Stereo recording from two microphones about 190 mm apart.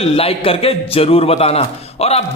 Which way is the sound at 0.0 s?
30° left (ahead or behind).